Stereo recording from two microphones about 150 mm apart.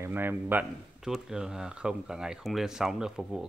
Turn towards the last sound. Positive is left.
turn(degrees=0)  # may be behind; listen again after turning